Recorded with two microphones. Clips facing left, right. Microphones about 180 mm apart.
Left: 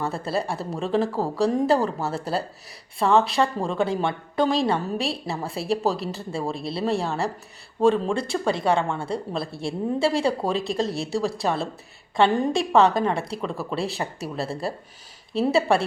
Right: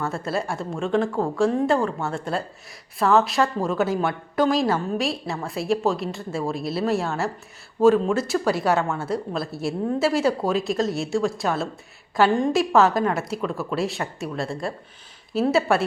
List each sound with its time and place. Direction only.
0.0 s a woman's voice: centre (ahead or behind)
6.7 s speech: 30° left (ahead or behind)
6.9 s a woman's voice: centre (ahead or behind)